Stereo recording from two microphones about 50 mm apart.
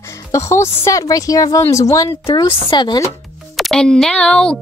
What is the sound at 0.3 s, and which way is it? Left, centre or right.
Speech, left.